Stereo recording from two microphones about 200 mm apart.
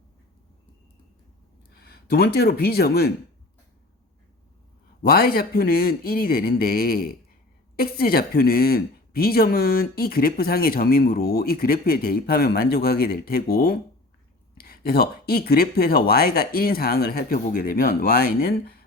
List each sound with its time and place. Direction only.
1.7 s speech: 50° left (ahead or behind)
5.0 s speech: 50° left (ahead or behind)